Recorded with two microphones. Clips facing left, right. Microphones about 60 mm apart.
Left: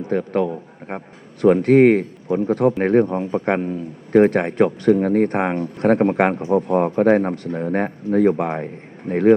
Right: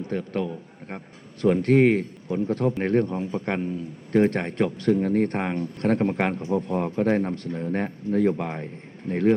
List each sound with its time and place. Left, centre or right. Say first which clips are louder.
0.1 s a man's voice: left 9 dB; left
1.7 s a man's voice: left 6 dB; left
2.4 s a man's voice: left 6 dB; left
4.3 s a man's voice: left 7 dB; centre